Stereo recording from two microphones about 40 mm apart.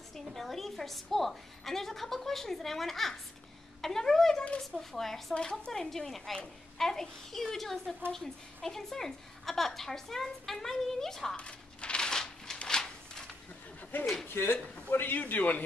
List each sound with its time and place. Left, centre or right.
0.3 s a woman's voice: centre
5.3 s a woman's voice: left
5.7 s a woman's voice: centre
11.3 s a sound: left
13.9 s a man's voice: left